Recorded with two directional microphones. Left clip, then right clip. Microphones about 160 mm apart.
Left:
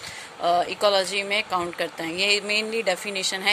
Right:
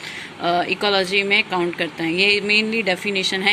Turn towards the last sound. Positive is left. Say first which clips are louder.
# right 5 dB
turn(degrees=45)  # may be behind; listen again after turning